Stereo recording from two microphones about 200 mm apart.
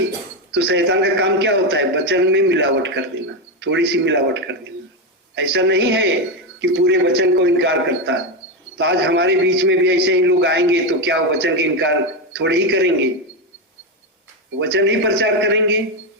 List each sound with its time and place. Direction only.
0.5 s a man's voice: 60° right (ahead or behind)
14.6 s a man's voice: 60° right (ahead or behind)